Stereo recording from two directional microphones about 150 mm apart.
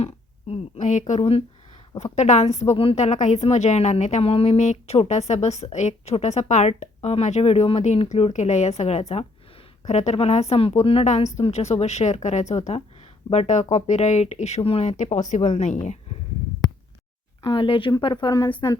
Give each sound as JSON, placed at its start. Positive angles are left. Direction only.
{"t": 0.0, "sound": "a woman's voice", "side_deg": 40}
{"t": 17.4, "sound": "speech", "side_deg": 35}